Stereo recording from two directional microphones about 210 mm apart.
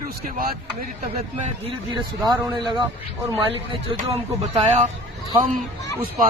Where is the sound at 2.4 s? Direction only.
20° right (ahead or behind).